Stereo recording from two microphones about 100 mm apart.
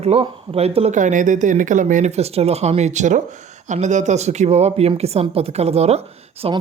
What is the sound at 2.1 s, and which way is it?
Speech, 90° right.